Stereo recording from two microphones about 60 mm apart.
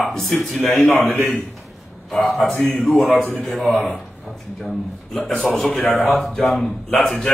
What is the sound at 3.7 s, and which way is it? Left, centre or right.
Speech, left.